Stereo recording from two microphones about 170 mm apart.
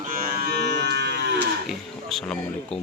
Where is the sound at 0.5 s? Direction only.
75° right (ahead or behind).